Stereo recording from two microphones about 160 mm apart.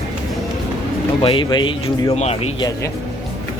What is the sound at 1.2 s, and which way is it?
Speech, 30° left (ahead or behind).